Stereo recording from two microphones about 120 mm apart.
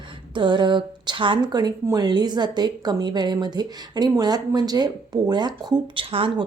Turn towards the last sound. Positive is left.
turn(degrees=-50)  # may be behind; listen again after turning